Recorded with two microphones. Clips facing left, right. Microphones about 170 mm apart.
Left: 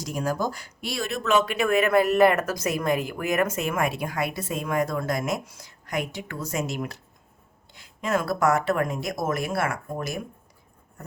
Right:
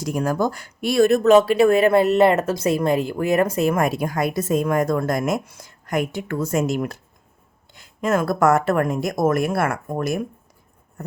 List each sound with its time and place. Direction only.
0.0 s speech: 55° right (ahead or behind)